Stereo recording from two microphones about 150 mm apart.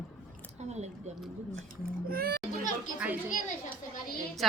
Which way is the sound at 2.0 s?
85° right.